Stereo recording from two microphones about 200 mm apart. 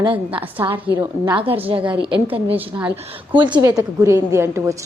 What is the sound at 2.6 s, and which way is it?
Speech, 10° right (ahead or behind).